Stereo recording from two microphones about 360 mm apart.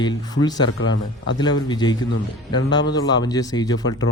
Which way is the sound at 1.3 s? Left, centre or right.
Centre.